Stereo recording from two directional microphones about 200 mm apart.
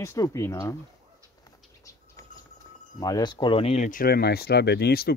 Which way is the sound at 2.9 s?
20° left (ahead or behind).